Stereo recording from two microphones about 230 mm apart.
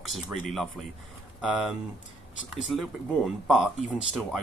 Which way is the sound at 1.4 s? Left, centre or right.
Centre.